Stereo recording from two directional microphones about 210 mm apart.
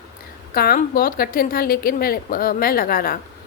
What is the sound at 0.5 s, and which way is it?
A woman's voice, 45° left (ahead or behind).